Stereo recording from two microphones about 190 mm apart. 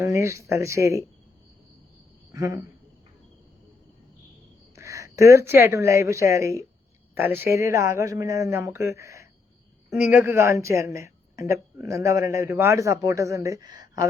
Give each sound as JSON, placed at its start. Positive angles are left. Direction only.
{"t": 0.0, "sound": "speech", "side_deg": -15}
{"t": 2.3, "sound": "speech", "side_deg": -15}
{"t": 4.7, "sound": "speech", "side_deg": -15}